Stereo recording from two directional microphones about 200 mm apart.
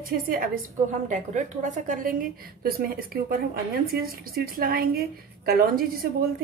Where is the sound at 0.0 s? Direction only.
45° right (ahead or behind).